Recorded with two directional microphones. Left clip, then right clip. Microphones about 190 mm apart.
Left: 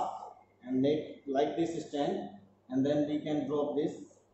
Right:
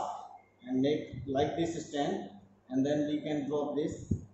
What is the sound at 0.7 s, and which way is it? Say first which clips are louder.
A man's voice: left 1 dB; 5° left (ahead or behind).